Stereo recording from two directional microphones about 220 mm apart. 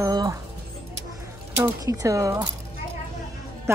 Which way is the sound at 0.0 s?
15° right (ahead or behind).